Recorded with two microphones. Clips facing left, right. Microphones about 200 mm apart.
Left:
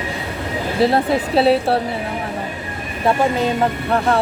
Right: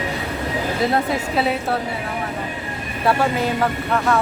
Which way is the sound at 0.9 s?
30° left (ahead or behind).